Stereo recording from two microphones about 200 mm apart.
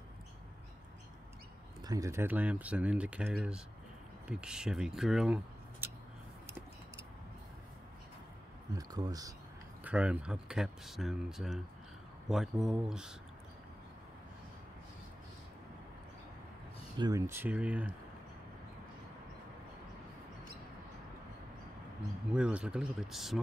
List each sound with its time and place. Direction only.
1.8 s speech: 20° right (ahead or behind)
8.7 s speech: 20° right (ahead or behind)
9.8 s speech: 5° right (ahead or behind)
17.0 s speech: 15° right (ahead or behind)
22.3 s speech: 5° right (ahead or behind)